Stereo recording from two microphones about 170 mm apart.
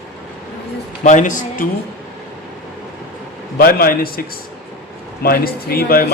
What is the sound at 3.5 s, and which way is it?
Speech, 60° left (ahead or behind).